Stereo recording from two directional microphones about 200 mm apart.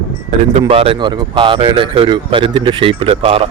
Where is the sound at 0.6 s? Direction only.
30° right (ahead or behind).